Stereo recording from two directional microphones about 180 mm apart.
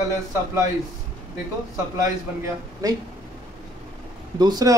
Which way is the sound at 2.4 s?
20° right (ahead or behind).